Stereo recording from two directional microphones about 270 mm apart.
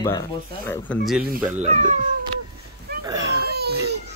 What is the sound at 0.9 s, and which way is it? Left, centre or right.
Speech, centre.